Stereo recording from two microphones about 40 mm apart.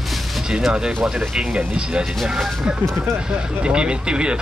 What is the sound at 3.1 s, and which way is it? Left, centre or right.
Speech, right.